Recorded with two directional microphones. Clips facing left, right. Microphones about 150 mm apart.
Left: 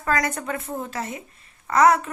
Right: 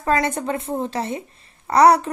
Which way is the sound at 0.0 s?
25° right (ahead or behind).